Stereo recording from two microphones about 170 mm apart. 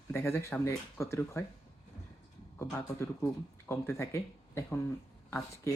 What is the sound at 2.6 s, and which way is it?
Speech, 15° left (ahead or behind).